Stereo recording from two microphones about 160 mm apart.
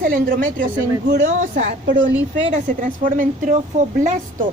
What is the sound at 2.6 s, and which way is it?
A woman's voice, 55° right (ahead or behind).